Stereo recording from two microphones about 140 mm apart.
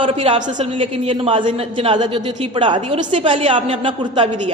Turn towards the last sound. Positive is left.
turn(degrees=-35)  # may be behind; listen again after turning